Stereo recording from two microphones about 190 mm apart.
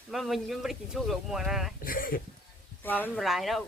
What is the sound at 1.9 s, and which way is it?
Speech, 50° left (ahead or behind).